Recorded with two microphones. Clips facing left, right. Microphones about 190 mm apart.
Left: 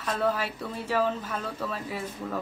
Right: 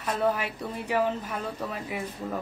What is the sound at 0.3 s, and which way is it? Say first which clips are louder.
Speech: right 1 dB; 15° right (ahead or behind).